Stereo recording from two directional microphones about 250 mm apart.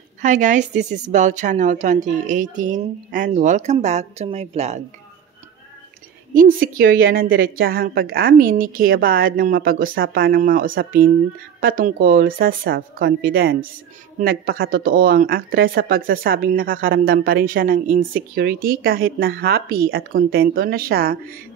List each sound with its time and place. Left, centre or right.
0.2 s a woman's voice: right
6.3 s speech: right